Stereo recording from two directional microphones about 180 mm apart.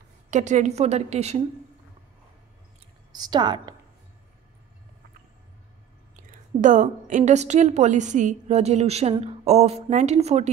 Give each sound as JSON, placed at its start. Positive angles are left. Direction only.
{"t": 0.3, "sound": "a woman's voice", "side_deg": -40}
{"t": 3.1, "sound": "a woman's voice", "side_deg": -25}
{"t": 6.6, "sound": "a woman's voice", "side_deg": -45}